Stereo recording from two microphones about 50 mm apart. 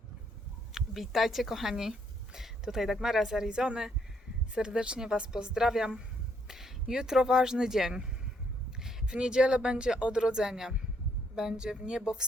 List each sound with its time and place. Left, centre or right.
0.7 s speech: centre
8.8 s a sound: centre
9.1 s speech: centre